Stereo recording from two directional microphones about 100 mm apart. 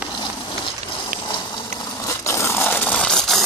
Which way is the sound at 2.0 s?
30° left (ahead or behind).